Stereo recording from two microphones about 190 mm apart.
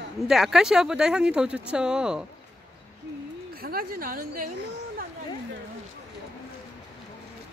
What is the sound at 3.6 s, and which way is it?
Speech, 50° right (ahead or behind).